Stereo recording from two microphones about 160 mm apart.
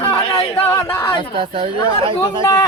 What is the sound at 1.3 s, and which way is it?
Speech, 35° right (ahead or behind).